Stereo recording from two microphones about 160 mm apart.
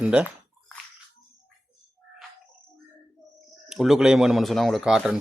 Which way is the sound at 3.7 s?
Centre (ahead or behind).